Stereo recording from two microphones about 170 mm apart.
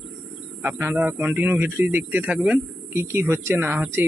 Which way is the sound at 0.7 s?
10° right (ahead or behind).